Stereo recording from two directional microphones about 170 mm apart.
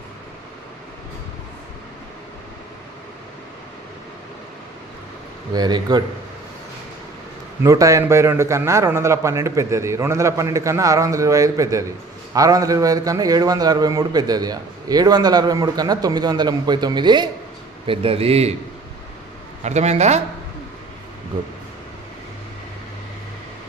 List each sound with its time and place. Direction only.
5.5 s a man's voice: 25° right (ahead or behind)
7.6 s a man's voice: 20° right (ahead or behind); by 18.5 s 35° right (ahead or behind)
19.6 s a man's voice: 40° right (ahead or behind)